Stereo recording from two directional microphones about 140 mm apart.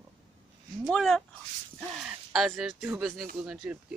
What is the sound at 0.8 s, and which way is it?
Speech, 5° left (ahead or behind).